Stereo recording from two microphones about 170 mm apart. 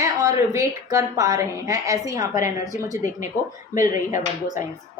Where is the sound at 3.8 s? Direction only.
50° left (ahead or behind).